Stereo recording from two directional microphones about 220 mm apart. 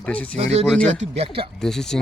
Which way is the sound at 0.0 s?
5° left (ahead or behind).